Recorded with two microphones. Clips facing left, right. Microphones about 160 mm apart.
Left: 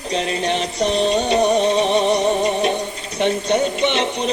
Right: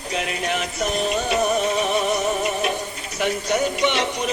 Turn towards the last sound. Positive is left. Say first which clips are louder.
# left 3 dB
turn(degrees=25)  # may be behind; listen again after turning